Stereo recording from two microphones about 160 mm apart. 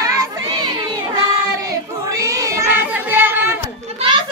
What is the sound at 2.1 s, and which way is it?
Child singing, 20° right (ahead or behind).